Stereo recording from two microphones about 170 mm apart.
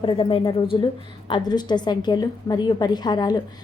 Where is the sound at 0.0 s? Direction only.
30° left (ahead or behind).